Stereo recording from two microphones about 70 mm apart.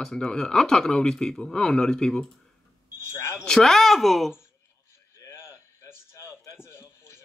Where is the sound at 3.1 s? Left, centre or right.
Left.